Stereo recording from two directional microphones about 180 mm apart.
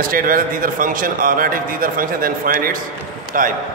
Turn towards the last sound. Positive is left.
turn(degrees=-50)  # may be behind; listen again after turning